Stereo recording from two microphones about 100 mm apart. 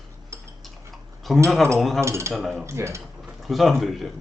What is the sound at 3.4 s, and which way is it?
Speech, centre (ahead or behind).